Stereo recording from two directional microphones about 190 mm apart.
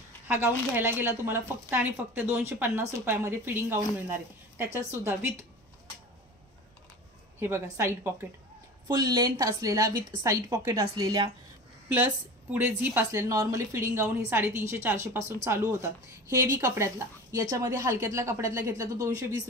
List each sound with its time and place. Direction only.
0.3 s a woman's voice: 10° right (ahead or behind)
7.3 s a woman's voice: 15° right (ahead or behind)